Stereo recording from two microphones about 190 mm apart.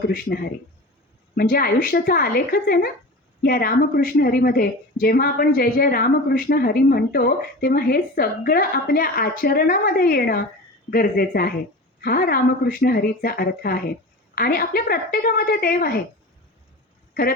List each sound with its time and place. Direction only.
0.1 s a woman's voice: 55° left (ahead or behind)